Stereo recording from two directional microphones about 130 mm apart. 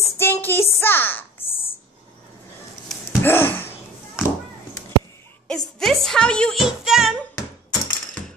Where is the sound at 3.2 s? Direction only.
15° left (ahead or behind).